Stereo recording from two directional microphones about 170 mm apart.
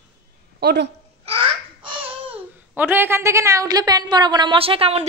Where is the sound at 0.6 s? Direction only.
75° right (ahead or behind).